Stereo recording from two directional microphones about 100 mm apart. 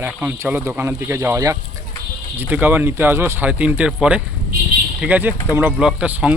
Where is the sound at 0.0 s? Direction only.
20° right (ahead or behind).